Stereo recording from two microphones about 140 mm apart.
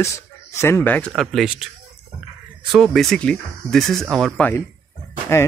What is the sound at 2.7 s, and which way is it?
Speech, centre (ahead or behind).